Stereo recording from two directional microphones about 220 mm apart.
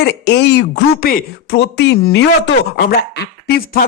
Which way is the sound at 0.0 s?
50° left (ahead or behind).